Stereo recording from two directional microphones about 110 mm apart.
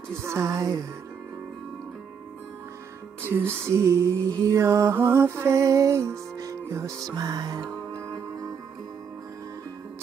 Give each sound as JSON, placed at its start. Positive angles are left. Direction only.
{"t": 0.1, "sound": "mantra", "side_deg": -25}
{"t": 3.2, "sound": "mantra", "side_deg": -20}